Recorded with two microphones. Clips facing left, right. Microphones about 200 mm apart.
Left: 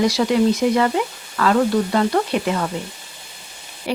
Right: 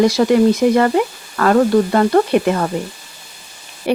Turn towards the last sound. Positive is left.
turn(degrees=-55)  # may be behind; listen again after turning